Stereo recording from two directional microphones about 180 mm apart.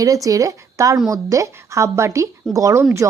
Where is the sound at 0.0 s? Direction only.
20° right (ahead or behind).